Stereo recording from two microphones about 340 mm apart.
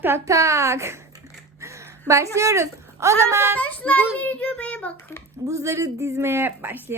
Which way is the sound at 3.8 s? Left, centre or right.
Centre.